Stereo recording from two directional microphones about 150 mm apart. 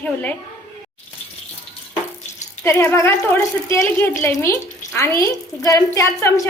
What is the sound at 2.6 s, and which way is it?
A woman's voice, 15° left (ahead or behind).